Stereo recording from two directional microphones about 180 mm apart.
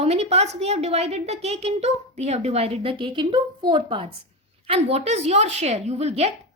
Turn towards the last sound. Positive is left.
turn(degrees=-35)  # may be behind; listen again after turning